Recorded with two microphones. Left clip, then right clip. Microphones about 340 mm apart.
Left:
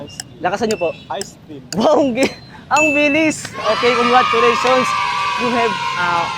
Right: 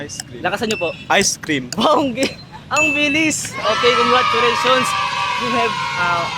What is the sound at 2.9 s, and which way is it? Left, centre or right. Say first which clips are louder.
Music: left 2 dB; centre.